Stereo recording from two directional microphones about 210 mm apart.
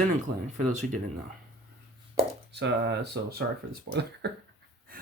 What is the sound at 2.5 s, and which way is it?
Speech, 55° right (ahead or behind).